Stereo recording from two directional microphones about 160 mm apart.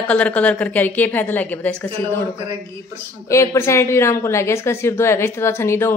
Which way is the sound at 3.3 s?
15° left (ahead or behind).